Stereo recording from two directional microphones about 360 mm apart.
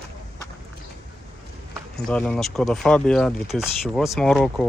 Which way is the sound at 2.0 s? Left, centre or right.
Centre.